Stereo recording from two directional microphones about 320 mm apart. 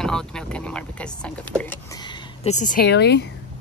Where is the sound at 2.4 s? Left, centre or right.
Left.